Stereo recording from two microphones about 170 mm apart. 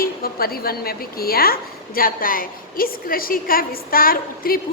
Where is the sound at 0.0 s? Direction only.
60° left (ahead or behind).